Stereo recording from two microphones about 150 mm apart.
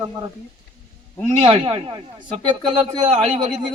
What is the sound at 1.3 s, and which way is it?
A man's voice, 40° right (ahead or behind).